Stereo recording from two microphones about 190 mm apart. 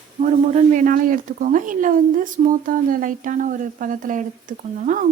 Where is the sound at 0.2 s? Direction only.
40° right (ahead or behind).